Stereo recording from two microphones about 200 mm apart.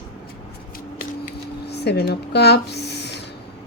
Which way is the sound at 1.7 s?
55° left (ahead or behind).